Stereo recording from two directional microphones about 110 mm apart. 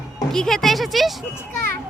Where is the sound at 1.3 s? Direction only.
20° left (ahead or behind).